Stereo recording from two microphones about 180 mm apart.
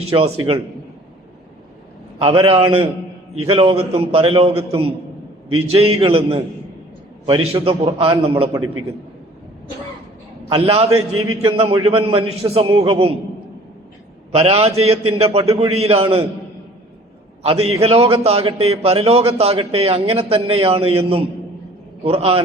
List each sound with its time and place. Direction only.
0.1 s a man's voice: 30° right (ahead or behind)
2.1 s a man's voice: 30° right (ahead or behind)
10.5 s a man's voice: 35° right (ahead or behind)
14.3 s a man's voice: 35° right (ahead or behind)
17.4 s a man's voice: 35° right (ahead or behind)